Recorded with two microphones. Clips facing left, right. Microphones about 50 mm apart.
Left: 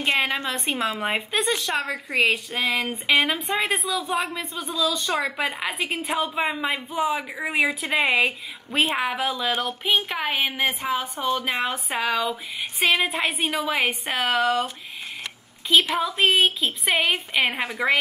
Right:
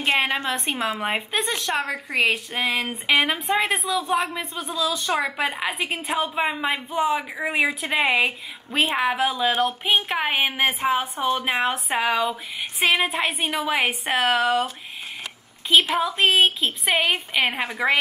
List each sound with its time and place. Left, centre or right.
0.0 s a woman's voice: centre
0.6 s a woman's voice: centre
11.4 s a woman's voice: centre
15.7 s a woman's voice: centre